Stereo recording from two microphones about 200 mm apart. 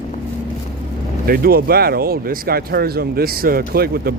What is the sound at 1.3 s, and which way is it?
Speech, 50° right (ahead or behind).